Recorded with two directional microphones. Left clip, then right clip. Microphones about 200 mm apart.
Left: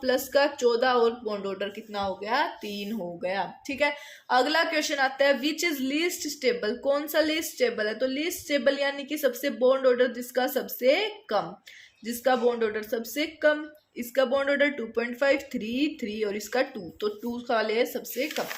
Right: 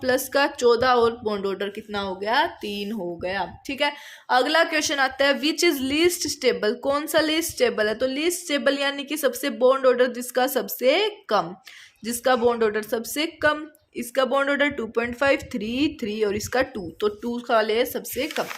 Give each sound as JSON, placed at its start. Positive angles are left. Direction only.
{"t": 0.0, "sound": "speech", "side_deg": -50}